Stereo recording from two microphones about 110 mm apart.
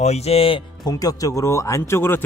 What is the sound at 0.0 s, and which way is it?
Speech, 75° left (ahead or behind).